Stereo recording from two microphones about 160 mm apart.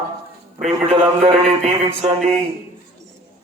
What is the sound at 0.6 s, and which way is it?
A man's voice, 40° right (ahead or behind).